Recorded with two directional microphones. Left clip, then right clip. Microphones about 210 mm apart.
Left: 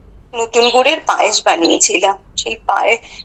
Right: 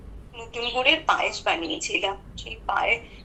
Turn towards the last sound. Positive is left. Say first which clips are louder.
# left 11 dB
turn(degrees=60)  # may be behind; listen again after turning